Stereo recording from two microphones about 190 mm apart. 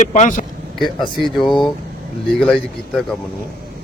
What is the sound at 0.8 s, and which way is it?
Speech, centre (ahead or behind).